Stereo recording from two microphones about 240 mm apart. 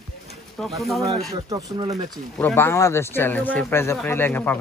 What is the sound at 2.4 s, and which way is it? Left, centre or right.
Speech, centre.